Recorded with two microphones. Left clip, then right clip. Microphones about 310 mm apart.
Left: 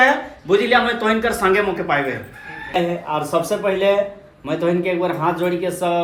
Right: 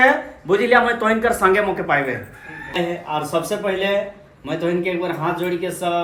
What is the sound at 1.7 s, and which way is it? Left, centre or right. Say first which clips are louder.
Speech: even; centre.